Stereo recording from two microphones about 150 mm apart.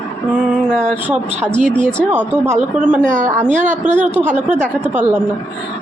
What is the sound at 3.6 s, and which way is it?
A woman's voice, 10° right (ahead or behind).